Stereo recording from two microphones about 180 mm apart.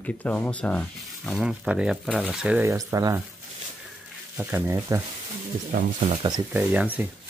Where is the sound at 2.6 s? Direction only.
15° right (ahead or behind).